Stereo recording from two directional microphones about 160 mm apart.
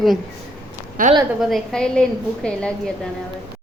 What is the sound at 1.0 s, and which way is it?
Speech, 60° right (ahead or behind).